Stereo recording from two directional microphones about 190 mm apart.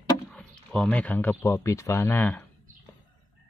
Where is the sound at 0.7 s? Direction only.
5° left (ahead or behind).